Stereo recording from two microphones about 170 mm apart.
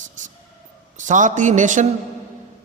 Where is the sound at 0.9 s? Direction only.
50° right (ahead or behind).